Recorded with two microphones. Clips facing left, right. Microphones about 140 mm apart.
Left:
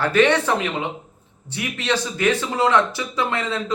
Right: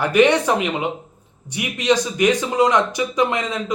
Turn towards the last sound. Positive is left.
turn(degrees=-15)  # may be behind; listen again after turning